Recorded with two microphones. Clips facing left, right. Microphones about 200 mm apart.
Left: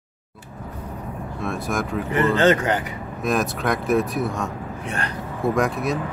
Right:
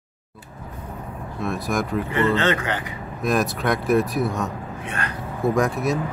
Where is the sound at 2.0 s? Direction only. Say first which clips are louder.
Left 5 dB; 40° left (ahead or behind).